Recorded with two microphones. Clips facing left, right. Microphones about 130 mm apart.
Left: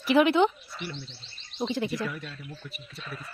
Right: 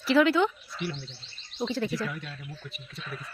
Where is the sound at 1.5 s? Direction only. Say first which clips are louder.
Even; 20° left (ahead or behind).